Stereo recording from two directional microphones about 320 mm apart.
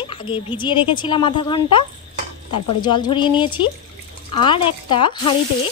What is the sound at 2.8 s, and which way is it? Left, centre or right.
A woman's voice, centre.